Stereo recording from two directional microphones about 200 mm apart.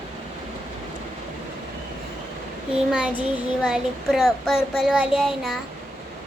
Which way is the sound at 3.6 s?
Centre (ahead or behind).